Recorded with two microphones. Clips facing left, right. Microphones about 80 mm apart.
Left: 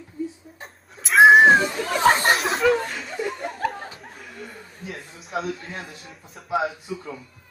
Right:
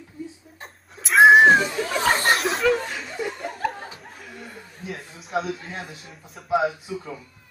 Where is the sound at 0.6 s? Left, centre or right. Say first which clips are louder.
Right 1 dB; centre.